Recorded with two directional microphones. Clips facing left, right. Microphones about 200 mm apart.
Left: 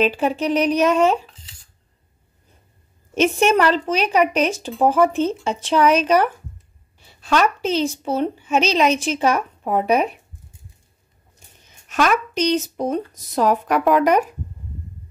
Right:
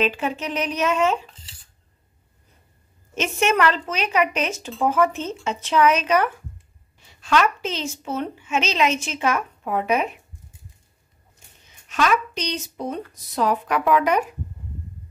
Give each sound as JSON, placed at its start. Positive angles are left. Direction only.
{"t": 0.0, "sound": "speech", "side_deg": 35}
{"t": 3.2, "sound": "speech", "side_deg": 35}
{"t": 11.9, "sound": "speech", "side_deg": 45}